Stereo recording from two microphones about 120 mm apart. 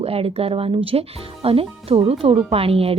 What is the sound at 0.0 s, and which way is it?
Speech, 55° right (ahead or behind).